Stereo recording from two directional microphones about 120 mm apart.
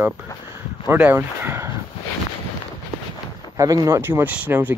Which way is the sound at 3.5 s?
30° right (ahead or behind).